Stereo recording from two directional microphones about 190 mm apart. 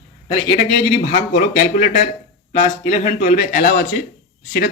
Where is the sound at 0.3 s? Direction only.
30° left (ahead or behind).